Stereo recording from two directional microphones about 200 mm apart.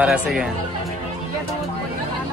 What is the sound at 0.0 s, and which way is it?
Speech, 5° right (ahead or behind).